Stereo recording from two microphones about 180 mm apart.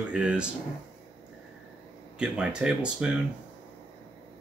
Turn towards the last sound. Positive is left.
turn(degrees=-5)  # may be behind; listen again after turning